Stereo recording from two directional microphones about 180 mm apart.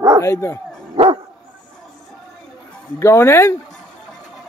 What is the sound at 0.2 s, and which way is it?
Speech, 15° left (ahead or behind).